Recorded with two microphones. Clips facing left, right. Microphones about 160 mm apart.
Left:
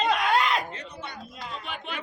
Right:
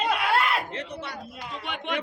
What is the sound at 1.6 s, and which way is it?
Speech, 80° right.